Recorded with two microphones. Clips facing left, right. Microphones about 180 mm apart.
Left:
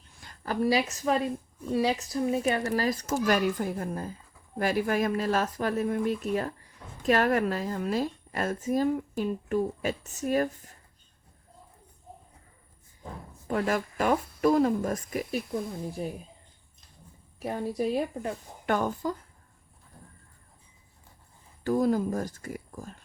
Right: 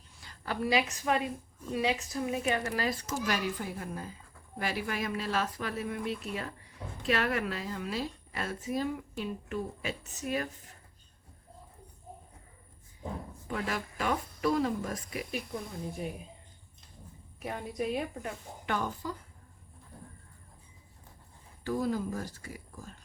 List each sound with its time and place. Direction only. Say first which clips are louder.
0.2 s a woman's voice: left 6 dB; 45° left (ahead or behind)
13.5 s a woman's voice: left 7 dB; 45° left (ahead or behind)
17.4 s a woman's voice: left 5 dB; 35° left (ahead or behind)
21.6 s a woman's voice: left 6 dB; 45° left (ahead or behind)